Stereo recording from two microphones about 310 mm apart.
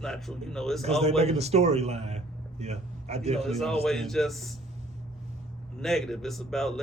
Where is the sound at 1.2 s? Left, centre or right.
Centre.